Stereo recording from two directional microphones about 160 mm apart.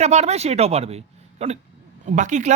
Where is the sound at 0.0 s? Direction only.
45° right (ahead or behind).